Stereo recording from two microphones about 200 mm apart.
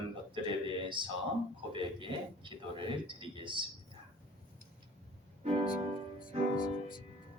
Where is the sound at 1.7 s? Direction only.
25° right (ahead or behind).